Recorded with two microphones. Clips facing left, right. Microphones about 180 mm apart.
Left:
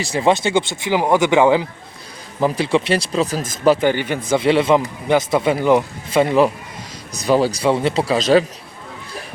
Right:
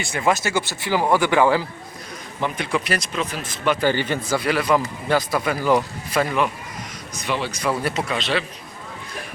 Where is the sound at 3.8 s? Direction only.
15° left (ahead or behind); by 8.4 s 40° left (ahead or behind).